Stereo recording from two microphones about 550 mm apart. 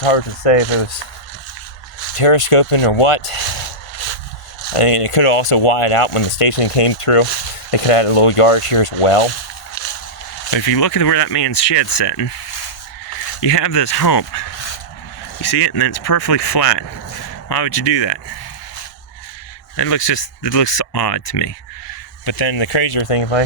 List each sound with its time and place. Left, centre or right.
0.0 s speech: left
2.1 s speech: left
3.9 s a sound: left
4.7 s speech: left
9.8 s a sound: left
10.5 s speech: left
13.4 s speech: left
19.7 s speech: left
22.3 s speech: left